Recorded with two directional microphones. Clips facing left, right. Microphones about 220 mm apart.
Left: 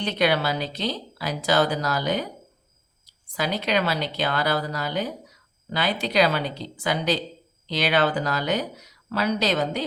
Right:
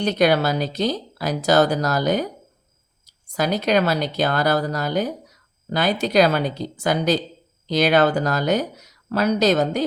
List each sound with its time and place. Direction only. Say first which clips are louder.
0.0 s speech: right 5 dB; 45° right (ahead or behind)